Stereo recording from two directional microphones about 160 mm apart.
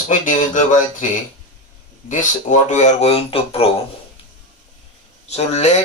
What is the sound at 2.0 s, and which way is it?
Speech, 50° left (ahead or behind).